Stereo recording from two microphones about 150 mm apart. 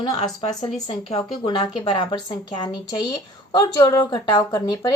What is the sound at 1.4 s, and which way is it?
A woman's voice, 30° left (ahead or behind).